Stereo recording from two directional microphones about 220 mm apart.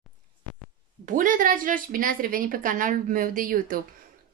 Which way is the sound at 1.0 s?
35° right (ahead or behind).